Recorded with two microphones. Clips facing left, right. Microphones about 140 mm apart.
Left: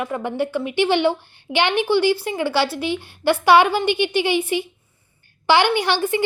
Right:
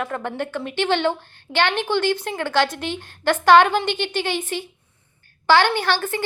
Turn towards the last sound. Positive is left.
turn(degrees=15)  # may be behind; listen again after turning